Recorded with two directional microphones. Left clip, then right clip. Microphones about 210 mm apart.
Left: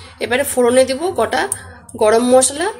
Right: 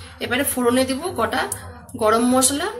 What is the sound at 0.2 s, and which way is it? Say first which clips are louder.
A woman's voice: left 6 dB; 40° left (ahead or behind).